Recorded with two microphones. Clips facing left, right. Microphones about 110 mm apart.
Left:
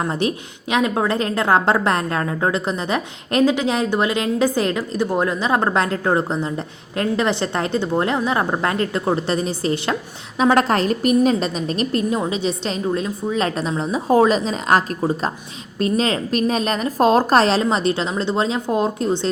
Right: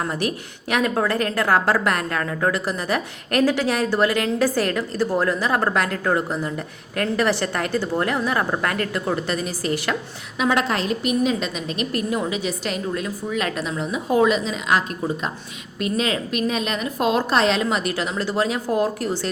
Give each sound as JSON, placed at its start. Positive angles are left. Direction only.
{"t": 0.0, "sound": "a woman's voice", "side_deg": 25}